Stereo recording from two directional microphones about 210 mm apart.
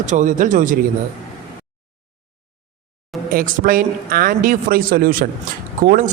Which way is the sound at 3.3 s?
40° right (ahead or behind).